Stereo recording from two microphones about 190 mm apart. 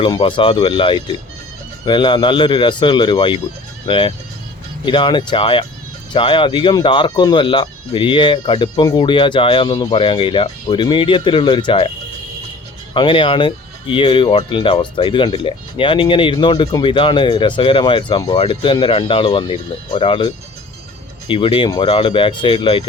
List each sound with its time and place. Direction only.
0.0 s speech: 25° left (ahead or behind)
12.9 s speech: 25° left (ahead or behind)